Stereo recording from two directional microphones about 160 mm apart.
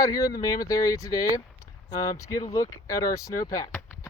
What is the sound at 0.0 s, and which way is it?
Speech, 20° left (ahead or behind).